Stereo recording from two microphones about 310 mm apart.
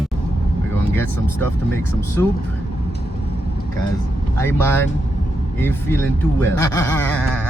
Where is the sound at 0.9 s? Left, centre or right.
Centre.